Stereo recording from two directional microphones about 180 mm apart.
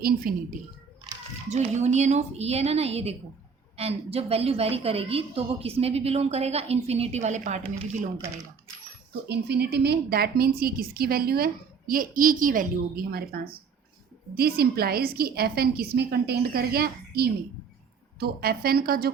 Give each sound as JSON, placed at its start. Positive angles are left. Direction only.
{"t": 0.3, "sound": "a woman's voice", "side_deg": -50}
{"t": 1.5, "sound": "a woman's voice", "side_deg": -40}
{"t": 9.3, "sound": "a woman's voice", "side_deg": -65}